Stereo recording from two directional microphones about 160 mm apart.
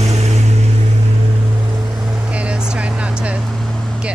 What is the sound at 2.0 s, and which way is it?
Vehicle, 5° right (ahead or behind).